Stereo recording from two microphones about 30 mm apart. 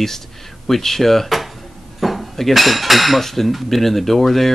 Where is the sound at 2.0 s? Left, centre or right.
Centre.